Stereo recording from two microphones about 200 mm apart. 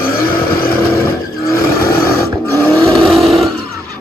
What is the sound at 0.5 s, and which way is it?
Vehicle, 50° left (ahead or behind).